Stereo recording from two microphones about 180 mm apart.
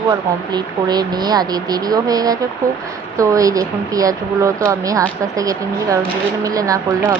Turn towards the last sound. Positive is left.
turn(degrees=-20)  # may be behind; listen again after turning